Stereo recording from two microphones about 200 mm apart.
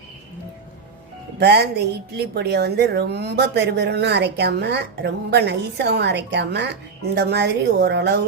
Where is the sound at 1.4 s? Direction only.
55° right (ahead or behind).